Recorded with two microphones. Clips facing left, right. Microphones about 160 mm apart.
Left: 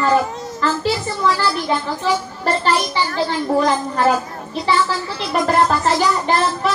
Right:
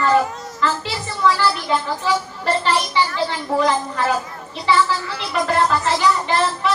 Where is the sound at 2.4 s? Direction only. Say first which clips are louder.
Left 2 dB; 40° left (ahead or behind).